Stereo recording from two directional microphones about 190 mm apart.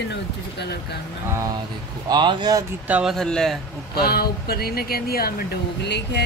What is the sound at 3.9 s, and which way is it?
Speech, 55° left (ahead or behind).